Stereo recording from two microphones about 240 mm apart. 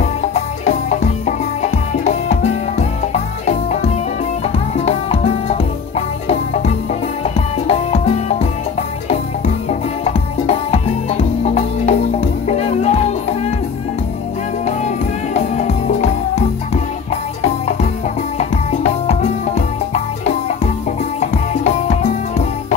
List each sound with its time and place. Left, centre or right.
0.0 s music: left
9.7 s music: left
15.3 s music: left
18.4 s music: left
21.2 s music: left